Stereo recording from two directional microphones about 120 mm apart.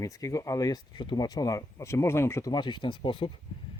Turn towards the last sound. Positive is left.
turn(degrees=45)  # may be behind; listen again after turning